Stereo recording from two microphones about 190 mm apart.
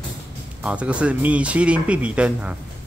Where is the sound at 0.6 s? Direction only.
5° right (ahead or behind).